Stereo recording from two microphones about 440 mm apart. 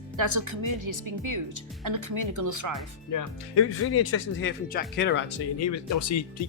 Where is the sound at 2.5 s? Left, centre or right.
Right.